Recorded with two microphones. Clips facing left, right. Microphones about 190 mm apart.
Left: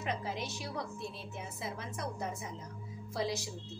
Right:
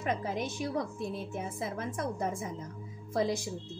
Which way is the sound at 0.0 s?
50° right (ahead or behind).